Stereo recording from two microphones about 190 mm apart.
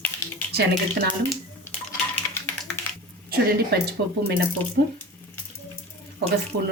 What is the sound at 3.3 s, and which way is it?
A woman's voice, 55° right (ahead or behind).